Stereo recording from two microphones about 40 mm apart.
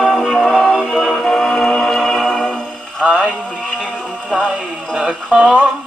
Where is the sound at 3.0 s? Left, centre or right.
Centre.